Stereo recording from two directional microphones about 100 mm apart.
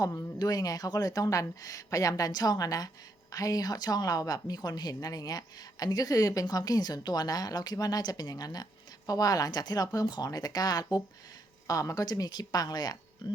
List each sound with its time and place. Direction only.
0.0 s speech: 25° left (ahead or behind)
0.3 s speech: 40° left (ahead or behind)